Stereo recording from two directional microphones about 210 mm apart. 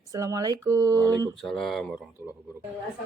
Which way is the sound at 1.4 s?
Centre (ahead or behind).